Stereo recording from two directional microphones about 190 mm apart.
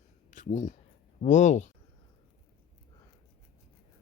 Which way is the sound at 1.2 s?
40° left (ahead or behind).